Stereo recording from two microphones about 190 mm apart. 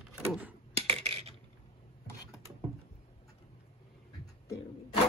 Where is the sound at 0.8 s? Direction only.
30° right (ahead or behind).